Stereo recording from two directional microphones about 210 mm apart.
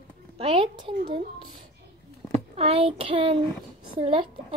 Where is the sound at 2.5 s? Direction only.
25° right (ahead or behind).